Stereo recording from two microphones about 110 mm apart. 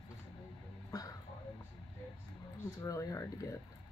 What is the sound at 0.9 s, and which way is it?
Music, 35° left (ahead or behind).